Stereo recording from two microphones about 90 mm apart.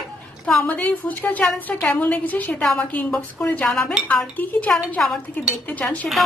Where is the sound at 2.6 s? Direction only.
5° left (ahead or behind).